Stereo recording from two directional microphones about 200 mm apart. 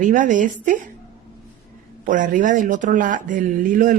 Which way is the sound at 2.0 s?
40° right (ahead or behind).